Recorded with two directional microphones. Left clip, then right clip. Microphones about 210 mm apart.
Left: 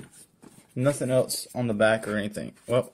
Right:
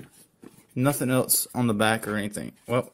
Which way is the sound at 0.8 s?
20° right (ahead or behind).